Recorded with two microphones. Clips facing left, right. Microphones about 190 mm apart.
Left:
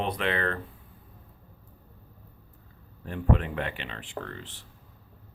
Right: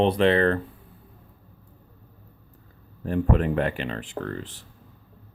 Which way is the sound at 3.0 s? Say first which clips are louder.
Right 5 dB; 40° right (ahead or behind).